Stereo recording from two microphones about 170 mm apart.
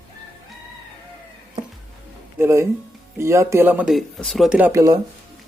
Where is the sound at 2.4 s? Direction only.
15° right (ahead or behind).